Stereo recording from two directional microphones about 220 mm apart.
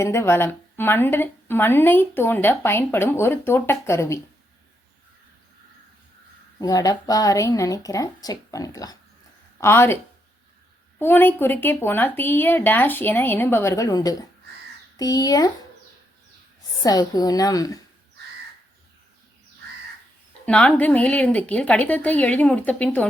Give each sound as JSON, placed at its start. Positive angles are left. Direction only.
{"t": 0.0, "sound": "speech", "side_deg": 10}
{"t": 6.6, "sound": "speech", "side_deg": 15}
{"t": 11.0, "sound": "speech", "side_deg": 10}
{"t": 16.8, "sound": "speech", "side_deg": 15}
{"t": 20.4, "sound": "speech", "side_deg": 5}